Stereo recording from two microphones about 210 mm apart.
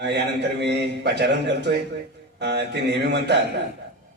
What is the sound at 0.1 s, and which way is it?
A man's voice, 55° right (ahead or behind).